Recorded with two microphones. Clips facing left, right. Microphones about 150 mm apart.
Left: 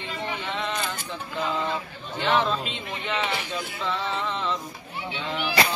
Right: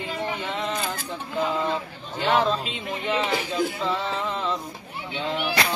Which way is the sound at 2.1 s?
35° right (ahead or behind).